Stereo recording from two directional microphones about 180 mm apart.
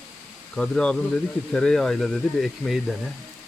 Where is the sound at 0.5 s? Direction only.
5° left (ahead or behind).